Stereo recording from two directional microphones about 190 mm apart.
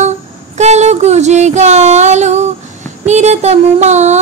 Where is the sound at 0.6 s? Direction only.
35° right (ahead or behind).